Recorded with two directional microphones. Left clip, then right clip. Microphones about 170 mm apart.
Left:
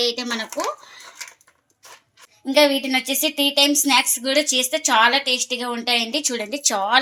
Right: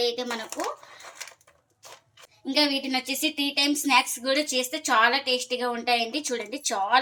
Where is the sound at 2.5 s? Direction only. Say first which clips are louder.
Left 8 dB; 45° left (ahead or behind).